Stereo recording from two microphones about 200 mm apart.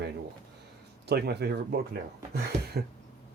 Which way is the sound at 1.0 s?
55° right (ahead or behind).